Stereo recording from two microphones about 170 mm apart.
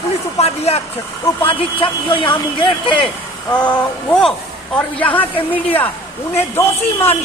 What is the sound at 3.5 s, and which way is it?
A man's voice, 5° left (ahead or behind).